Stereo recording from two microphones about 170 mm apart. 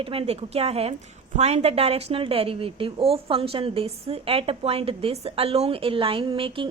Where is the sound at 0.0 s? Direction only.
35° right (ahead or behind).